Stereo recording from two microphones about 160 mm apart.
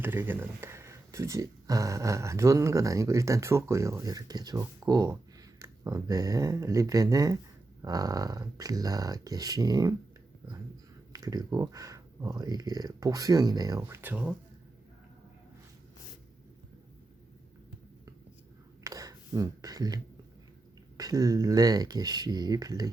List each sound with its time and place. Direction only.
0.0 s speech: 15° right (ahead or behind)
11.1 s speech: 25° right (ahead or behind)
13.8 s speech: 10° right (ahead or behind)
18.8 s a sound: 20° right (ahead or behind)
21.0 s speech: 25° right (ahead or behind)